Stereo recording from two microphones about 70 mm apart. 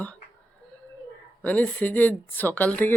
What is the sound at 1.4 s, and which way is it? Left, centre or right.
Speech, left.